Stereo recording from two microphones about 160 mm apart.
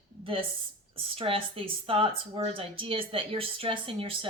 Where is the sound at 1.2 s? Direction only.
35° right (ahead or behind).